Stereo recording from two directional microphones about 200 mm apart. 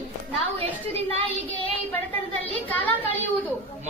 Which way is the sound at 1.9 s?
10° left (ahead or behind).